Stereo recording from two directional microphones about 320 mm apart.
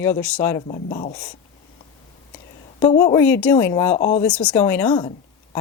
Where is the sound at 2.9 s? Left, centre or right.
Centre.